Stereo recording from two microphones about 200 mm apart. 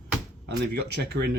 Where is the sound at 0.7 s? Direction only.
55° right (ahead or behind).